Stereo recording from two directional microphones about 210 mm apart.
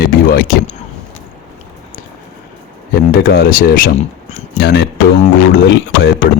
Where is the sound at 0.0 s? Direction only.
45° left (ahead or behind).